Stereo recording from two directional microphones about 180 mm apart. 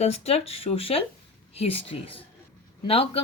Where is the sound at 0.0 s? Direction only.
35° left (ahead or behind).